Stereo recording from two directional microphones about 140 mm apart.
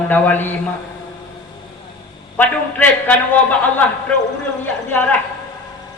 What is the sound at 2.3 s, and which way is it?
A man's voice, 10° left (ahead or behind).